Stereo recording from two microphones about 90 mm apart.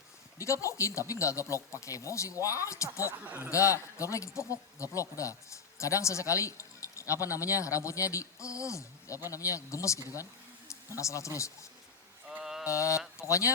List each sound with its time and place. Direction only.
0.3 s speech: 35° left (ahead or behind)
3.2 s speech: 20° right (ahead or behind)
3.5 s speech: 35° left (ahead or behind)
12.4 s mantra: 5° right (ahead or behind)
12.6 s speech: 35° left (ahead or behind)